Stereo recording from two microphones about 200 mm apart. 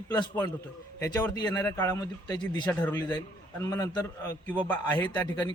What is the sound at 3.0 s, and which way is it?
A man's voice, 20° left (ahead or behind).